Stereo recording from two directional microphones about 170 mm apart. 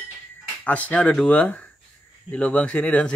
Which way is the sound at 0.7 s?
10° left (ahead or behind).